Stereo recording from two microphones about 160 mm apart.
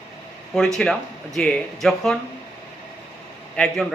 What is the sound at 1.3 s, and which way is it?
Speech, 5° left (ahead or behind).